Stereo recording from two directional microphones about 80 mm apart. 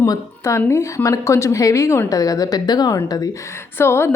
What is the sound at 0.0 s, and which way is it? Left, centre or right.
A woman's voice, left.